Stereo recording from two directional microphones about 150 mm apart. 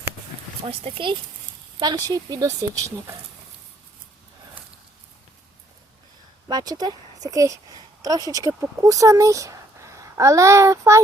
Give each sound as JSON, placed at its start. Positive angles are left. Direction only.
{"t": 0.6, "sound": "speech", "side_deg": -40}
{"t": 1.8, "sound": "speech", "side_deg": -25}
{"t": 6.5, "sound": "speech", "side_deg": -25}